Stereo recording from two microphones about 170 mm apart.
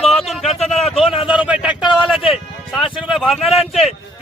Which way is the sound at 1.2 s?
5° right (ahead or behind).